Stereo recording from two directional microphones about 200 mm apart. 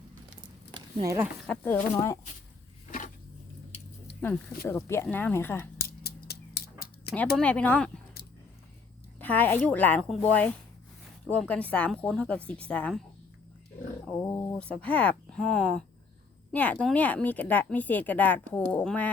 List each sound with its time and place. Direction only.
0.7 s a sound: 20° right (ahead or behind)
1.5 s speech: 10° left (ahead or behind)
3.7 s squish: 30° left (ahead or behind)
4.6 s speech: 15° left (ahead or behind)
5.7 s scissors: 50° left (ahead or behind)
7.3 s speech: 5° left (ahead or behind)
9.1 s speech: 10° left (ahead or behind)
14.3 s speech: 15° left (ahead or behind)